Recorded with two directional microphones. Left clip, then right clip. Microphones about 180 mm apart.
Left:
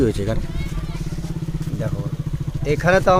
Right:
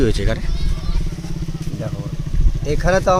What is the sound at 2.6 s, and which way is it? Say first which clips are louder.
Speech: left 1 dB; 5° left (ahead or behind).